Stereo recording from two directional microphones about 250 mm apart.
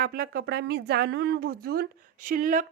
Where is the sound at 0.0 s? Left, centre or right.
Right.